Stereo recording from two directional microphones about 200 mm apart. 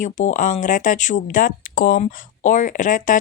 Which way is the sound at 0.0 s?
40° left (ahead or behind).